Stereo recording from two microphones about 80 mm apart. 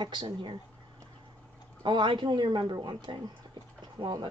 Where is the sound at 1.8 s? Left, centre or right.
Right.